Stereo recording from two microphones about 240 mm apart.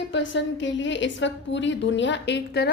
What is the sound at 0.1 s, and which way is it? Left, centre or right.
A woman's voice, left.